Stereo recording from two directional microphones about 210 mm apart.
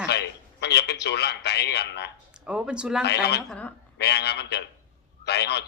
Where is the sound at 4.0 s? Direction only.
50° left (ahead or behind).